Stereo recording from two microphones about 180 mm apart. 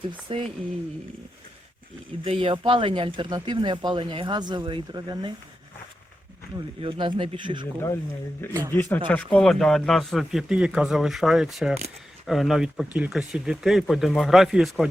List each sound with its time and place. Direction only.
0.1 s speech: 30° right (ahead or behind)
2.2 s speech: 30° right (ahead or behind)
6.7 s speech: 30° right (ahead or behind)
8.7 s speech: 10° left (ahead or behind)